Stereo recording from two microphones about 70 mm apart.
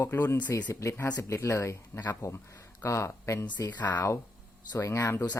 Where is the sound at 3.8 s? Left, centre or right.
Left.